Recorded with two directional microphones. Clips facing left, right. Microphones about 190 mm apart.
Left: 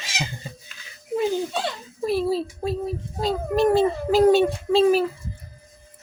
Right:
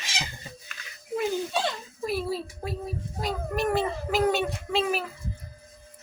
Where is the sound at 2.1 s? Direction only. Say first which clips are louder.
Left 7 dB; 30° left (ahead or behind).